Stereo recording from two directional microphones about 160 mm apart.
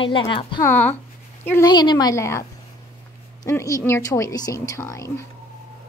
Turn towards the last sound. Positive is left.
turn(degrees=20)  # may be behind; listen again after turning